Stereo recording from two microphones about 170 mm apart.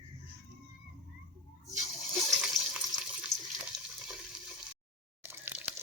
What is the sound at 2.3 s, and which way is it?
Water, centre (ahead or behind).